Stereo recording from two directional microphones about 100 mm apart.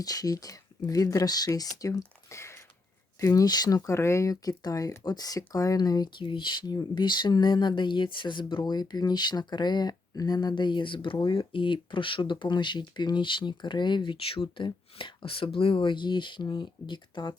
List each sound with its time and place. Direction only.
0.0 s speech: 40° left (ahead or behind)
6.2 s speech: 55° left (ahead or behind)